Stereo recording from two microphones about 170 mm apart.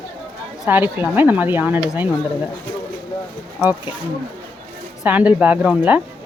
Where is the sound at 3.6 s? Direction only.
10° right (ahead or behind).